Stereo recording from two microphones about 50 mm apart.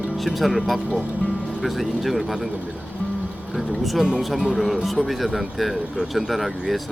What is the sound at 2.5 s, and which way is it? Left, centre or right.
Speech, right.